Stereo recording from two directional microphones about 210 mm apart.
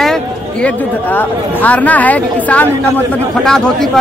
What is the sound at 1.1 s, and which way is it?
A man's voice, 5° left (ahead or behind).